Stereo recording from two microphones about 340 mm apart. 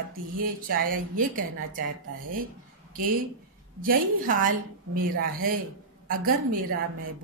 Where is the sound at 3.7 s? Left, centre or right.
Right.